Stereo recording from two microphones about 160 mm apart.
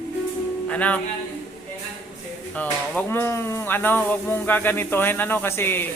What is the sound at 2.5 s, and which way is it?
Speech, 10° left (ahead or behind).